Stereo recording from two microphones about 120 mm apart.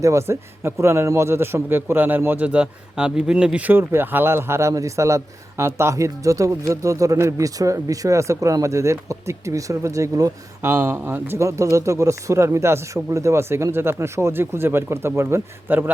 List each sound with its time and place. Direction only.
0.0 s a man's voice: 25° right (ahead or behind)